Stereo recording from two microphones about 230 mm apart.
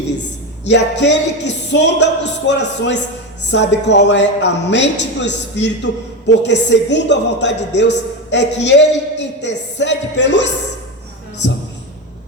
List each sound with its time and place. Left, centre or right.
0.6 s speech: left